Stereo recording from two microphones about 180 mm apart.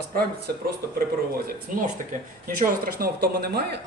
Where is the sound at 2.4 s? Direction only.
50° right (ahead or behind).